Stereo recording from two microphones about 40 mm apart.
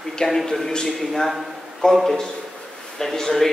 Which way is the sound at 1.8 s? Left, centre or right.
Left.